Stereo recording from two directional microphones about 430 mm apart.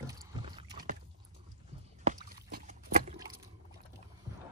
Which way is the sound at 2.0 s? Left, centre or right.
Centre.